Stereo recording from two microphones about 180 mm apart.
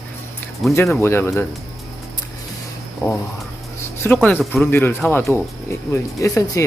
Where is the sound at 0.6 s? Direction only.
Centre (ahead or behind).